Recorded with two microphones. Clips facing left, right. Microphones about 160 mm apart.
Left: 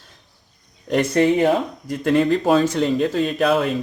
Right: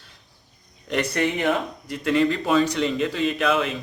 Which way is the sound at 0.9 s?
35° left (ahead or behind).